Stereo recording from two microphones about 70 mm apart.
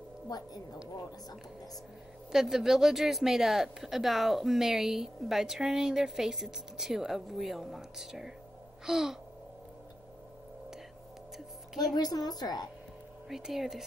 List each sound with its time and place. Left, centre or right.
2.3 s a woman's voice: centre
8.8 s a sound: centre
11.3 s music: centre
11.9 s a woman's voice: left
13.3 s a woman's voice: centre